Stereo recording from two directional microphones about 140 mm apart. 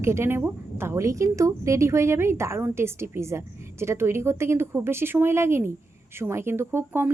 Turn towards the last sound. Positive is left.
turn(degrees=-15)  # may be behind; listen again after turning